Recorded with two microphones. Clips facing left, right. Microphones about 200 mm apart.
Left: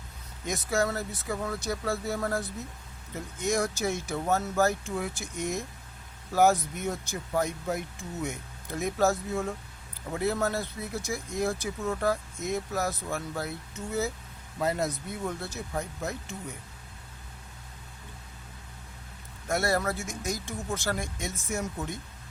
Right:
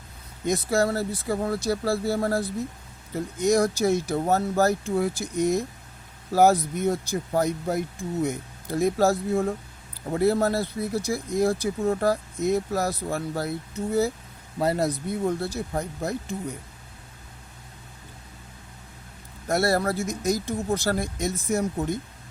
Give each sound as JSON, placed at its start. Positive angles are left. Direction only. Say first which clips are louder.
{"t": 0.4, "sound": "speech", "louder": "right 5 dB", "side_deg": -35}
{"t": 19.5, "sound": "speech", "louder": "right 5 dB", "side_deg": -35}